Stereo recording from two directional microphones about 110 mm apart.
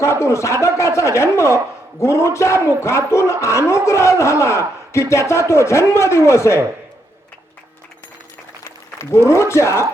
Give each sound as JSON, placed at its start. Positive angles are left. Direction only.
{"t": 0.0, "sound": "speech", "side_deg": 25}
{"t": 9.3, "sound": "speech", "side_deg": 25}